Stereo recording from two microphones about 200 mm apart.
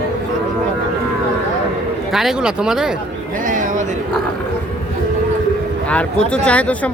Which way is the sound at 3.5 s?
40° right (ahead or behind).